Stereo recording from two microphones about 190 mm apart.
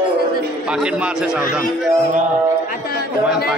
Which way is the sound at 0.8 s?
5° right (ahead or behind).